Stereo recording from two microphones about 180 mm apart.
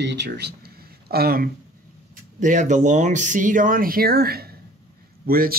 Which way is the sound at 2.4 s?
45° right (ahead or behind).